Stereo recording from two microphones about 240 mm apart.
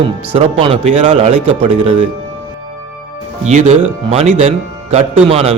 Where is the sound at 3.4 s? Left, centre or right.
Right.